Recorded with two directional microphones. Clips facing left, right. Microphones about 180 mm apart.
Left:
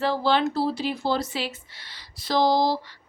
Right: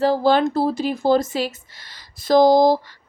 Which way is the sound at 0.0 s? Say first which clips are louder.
Right 6 dB; 45° right (ahead or behind).